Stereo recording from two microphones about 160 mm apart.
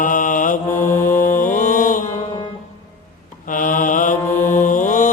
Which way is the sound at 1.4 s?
55° left (ahead or behind).